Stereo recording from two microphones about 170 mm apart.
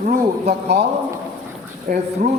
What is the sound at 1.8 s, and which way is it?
Speech, 45° right (ahead or behind).